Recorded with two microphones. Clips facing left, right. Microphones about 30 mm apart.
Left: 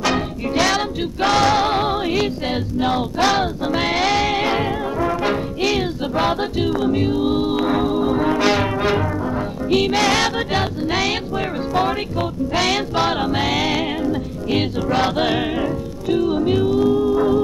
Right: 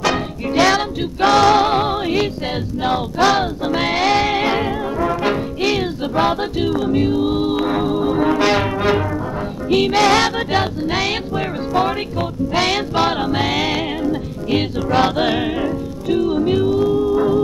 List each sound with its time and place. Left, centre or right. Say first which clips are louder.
0.7 s music: right 2 dB; centre
12.5 s music: right 1 dB; centre
12.9 s music: right 1 dB; centre
14.9 s music: right 4 dB; centre
15.1 s music: right 1 dB; centre